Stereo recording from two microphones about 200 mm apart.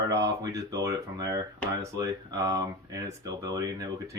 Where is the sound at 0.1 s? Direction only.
15° right (ahead or behind).